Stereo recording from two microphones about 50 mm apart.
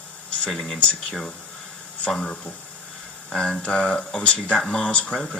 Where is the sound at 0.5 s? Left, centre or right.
Centre.